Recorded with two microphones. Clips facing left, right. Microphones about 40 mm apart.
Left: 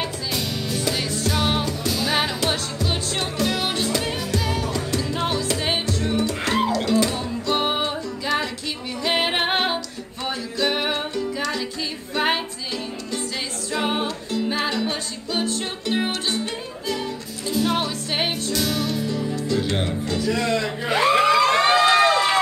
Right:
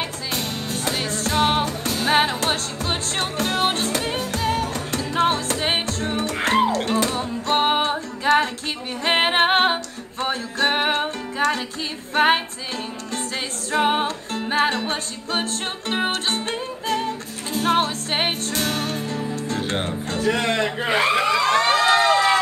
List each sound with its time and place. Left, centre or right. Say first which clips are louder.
0.3 s music: left 1 dB; right
13.7 s music: right 4 dB; right
21.1 s emergency vehicle: left 5 dB; left